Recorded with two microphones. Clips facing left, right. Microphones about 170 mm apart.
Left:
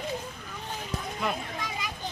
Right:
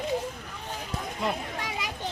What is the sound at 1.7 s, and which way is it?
Children playing, 75° right (ahead or behind).